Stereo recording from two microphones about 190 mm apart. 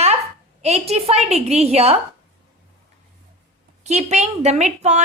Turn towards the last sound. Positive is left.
turn(degrees=-35)  # may be behind; listen again after turning